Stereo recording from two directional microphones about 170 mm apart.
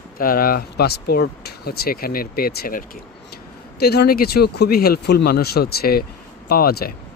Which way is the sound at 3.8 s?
70° left (ahead or behind).